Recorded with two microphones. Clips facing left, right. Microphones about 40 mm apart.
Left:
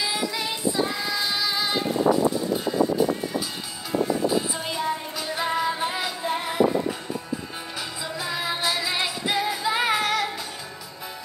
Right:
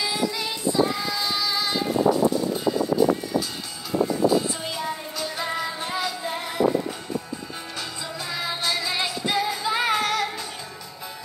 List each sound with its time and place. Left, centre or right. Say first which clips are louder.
0.7 s child singing: right 3 dB; centre
1.1 s child singing: even; left
4.3 s music: right 2 dB; centre
8.2 s music: left 2 dB; centre